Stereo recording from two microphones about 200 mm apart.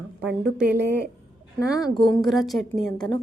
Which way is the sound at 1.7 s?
20° left (ahead or behind).